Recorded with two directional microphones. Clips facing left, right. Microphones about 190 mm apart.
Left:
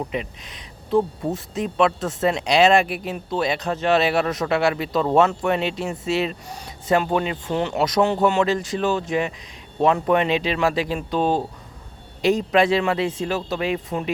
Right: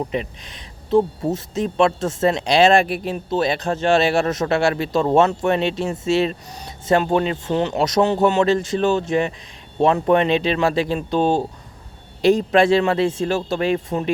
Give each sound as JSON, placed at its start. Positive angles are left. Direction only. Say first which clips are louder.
{"t": 0.1, "sound": "speech", "louder": "right 3 dB", "side_deg": -30}
{"t": 12.2, "sound": "speech", "louder": "right 3 dB", "side_deg": -35}